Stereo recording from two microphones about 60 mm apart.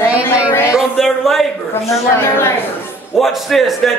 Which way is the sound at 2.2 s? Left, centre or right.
Left.